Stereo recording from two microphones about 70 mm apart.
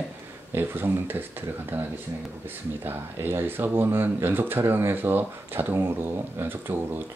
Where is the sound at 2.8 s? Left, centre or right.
Right.